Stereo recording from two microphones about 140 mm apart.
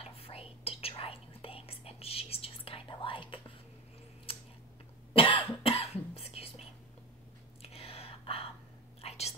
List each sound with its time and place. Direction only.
0.0 s whispering: 45° left (ahead or behind)
5.1 s cough: 40° left (ahead or behind)
6.1 s whispering: 45° left (ahead or behind)
7.6 s whispering: 45° left (ahead or behind)